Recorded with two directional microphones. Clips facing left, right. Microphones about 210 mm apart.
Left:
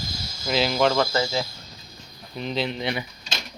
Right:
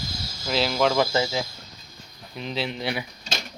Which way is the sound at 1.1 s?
15° right (ahead or behind).